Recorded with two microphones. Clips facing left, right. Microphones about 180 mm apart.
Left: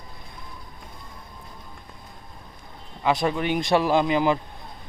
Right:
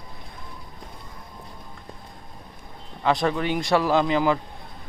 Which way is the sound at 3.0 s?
10° left (ahead or behind).